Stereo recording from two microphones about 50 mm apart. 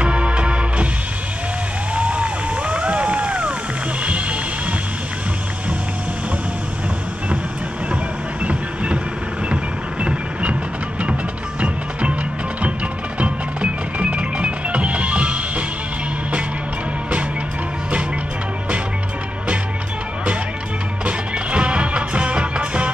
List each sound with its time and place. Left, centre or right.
0.0 s music: right
2.0 s music: right
8.5 s music: right
9.5 s vehicle: right
11.6 s music: right
13.2 s music: right
21.0 s music: right